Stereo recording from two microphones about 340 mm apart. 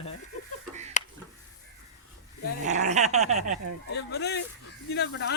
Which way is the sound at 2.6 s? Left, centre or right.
Centre.